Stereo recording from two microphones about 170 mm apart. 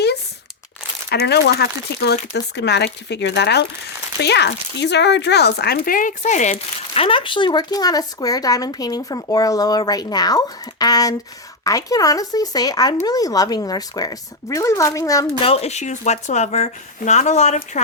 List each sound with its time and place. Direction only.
1.1 s speech: 75° left (ahead or behind)
2.3 s speech: 85° left; by 15.3 s 20° left (ahead or behind)
15.4 s speech: 35° left (ahead or behind)